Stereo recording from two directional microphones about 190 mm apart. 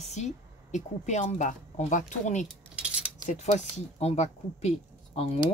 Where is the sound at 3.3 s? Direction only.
40° left (ahead or behind).